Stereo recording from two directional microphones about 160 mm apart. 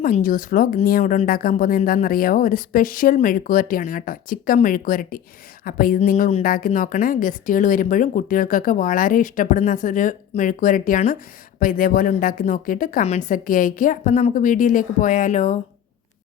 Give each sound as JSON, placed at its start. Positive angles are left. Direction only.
{"t": 0.0, "sound": "speech", "side_deg": 60}